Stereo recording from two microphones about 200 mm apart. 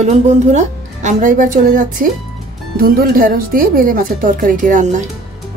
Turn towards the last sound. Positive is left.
turn(degrees=-40)  # may be behind; listen again after turning